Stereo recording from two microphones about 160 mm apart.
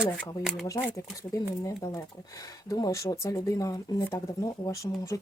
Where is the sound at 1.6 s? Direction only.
20° left (ahead or behind).